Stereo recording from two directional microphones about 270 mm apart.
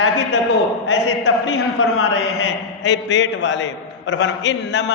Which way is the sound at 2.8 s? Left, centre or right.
Left.